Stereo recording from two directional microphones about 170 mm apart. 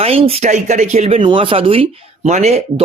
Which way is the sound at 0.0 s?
35° right (ahead or behind).